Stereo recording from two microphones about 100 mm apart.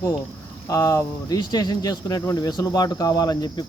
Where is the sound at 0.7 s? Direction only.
30° left (ahead or behind).